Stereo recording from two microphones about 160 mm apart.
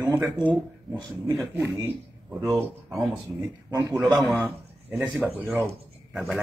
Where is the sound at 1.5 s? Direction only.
15° right (ahead or behind).